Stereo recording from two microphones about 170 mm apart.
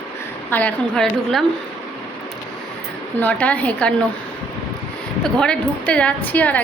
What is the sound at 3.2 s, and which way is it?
Speech, 10° left (ahead or behind).